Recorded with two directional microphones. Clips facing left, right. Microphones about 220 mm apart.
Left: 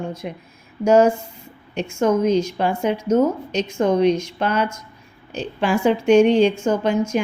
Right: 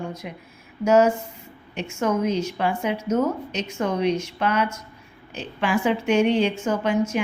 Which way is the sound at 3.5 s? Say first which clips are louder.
Left 6 dB; 5° right (ahead or behind).